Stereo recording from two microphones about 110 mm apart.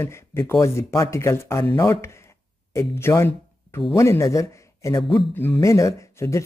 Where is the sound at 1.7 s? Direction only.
45° left (ahead or behind).